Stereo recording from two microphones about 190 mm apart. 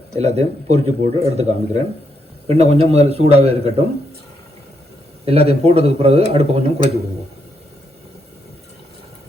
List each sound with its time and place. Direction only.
0.1 s speech: 35° right (ahead or behind)
5.2 s speech: 30° right (ahead or behind)